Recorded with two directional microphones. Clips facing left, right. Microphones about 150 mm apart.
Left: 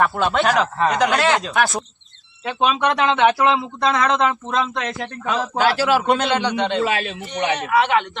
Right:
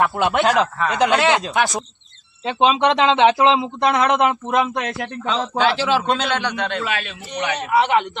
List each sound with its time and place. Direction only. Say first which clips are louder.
0.2 s speech: right 1 dB; 15° right (ahead or behind)
5.3 s a man's voice: even; 5° left (ahead or behind)
6.9 s a man's voice: left 2 dB; 30° left (ahead or behind)
7.7 s speech: right 2 dB; 10° right (ahead or behind)